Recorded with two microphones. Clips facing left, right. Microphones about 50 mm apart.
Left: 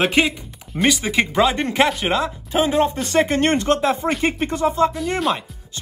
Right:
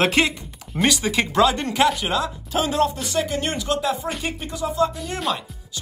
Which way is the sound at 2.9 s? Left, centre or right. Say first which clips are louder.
Left 6 dB; left.